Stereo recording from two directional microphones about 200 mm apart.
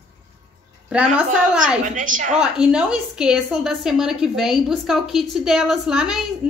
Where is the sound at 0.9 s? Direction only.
5° right (ahead or behind).